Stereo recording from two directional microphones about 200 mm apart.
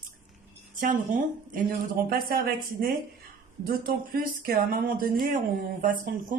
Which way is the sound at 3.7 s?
45° right (ahead or behind).